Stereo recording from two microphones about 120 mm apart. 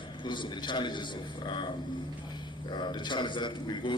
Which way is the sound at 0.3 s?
40° left (ahead or behind).